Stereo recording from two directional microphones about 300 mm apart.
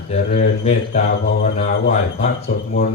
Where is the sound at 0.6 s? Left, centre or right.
Left.